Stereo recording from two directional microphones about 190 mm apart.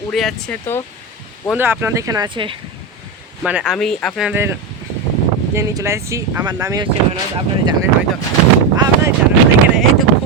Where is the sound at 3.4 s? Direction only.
5° right (ahead or behind).